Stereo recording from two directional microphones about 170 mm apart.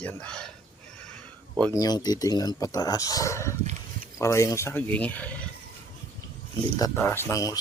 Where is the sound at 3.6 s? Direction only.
40° right (ahead or behind).